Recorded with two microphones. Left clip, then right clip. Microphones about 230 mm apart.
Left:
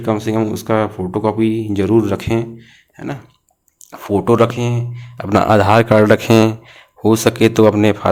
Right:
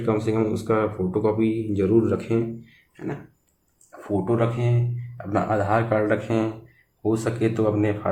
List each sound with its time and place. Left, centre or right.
0.0 s speech: left
4.3 s speech: left